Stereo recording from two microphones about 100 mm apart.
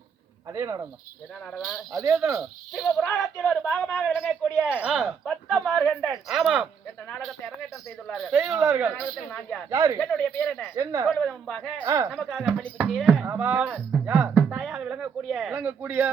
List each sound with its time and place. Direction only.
0.5 s speech: 25° right (ahead or behind)
1.5 s speech: centre (ahead or behind)
1.9 s a woman's voice: 35° right (ahead or behind)
2.4 s speech: centre (ahead or behind)
8.8 s speech: 15° right (ahead or behind)
9.6 s a woman's voice: 35° right (ahead or behind)
10.0 s speech: 10° left (ahead or behind)
10.8 s a woman's voice: 35° right (ahead or behind)
11.1 s speech: 5° left (ahead or behind)
11.8 s speech: 25° right (ahead or behind)
12.1 s speech: centre (ahead or behind)
13.2 s speech: 20° right (ahead or behind)
14.3 s music: 10° right (ahead or behind)
15.5 s speech: 20° right (ahead or behind)